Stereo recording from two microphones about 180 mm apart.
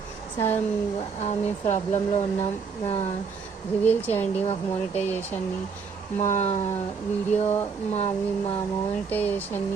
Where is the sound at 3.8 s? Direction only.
10° left (ahead or behind).